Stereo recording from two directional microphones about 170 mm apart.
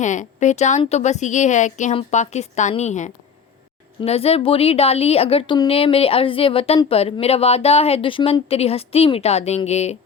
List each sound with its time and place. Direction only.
0.0 s a woman's voice: 45° left (ahead or behind)